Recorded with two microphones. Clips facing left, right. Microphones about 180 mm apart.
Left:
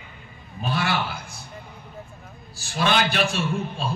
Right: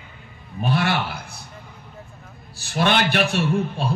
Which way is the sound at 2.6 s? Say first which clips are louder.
Right 2 dB; 60° right (ahead or behind).